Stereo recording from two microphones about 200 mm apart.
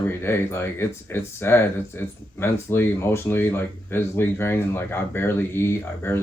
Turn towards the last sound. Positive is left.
turn(degrees=10)  # may be behind; listen again after turning